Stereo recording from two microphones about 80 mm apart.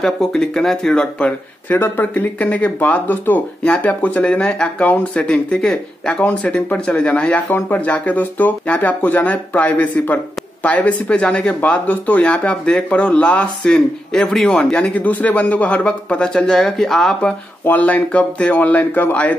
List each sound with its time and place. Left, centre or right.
0.0 s speech: centre
1.2 s speech: left; by 6.2 s centre
6.2 s speech: centre
17.6 s speech: centre